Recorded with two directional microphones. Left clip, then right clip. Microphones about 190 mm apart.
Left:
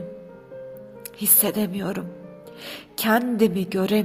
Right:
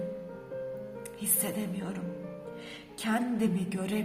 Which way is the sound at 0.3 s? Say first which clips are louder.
Even; centre (ahead or behind).